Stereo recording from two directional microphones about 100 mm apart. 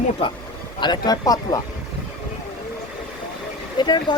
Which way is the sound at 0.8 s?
45° left (ahead or behind).